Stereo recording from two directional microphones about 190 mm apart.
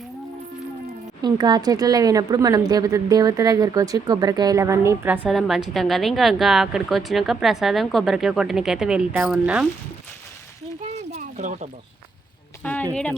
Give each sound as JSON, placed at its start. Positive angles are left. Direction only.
{"t": 1.2, "sound": "a woman's voice", "side_deg": -20}
{"t": 11.1, "sound": "a sound", "side_deg": -40}
{"t": 12.6, "sound": "speech", "side_deg": 10}